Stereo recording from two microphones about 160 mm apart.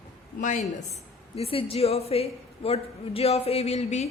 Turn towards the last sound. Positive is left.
turn(degrees=45)  # may be behind; listen again after turning